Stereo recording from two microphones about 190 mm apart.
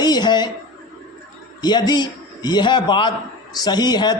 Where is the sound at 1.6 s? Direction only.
20° left (ahead or behind).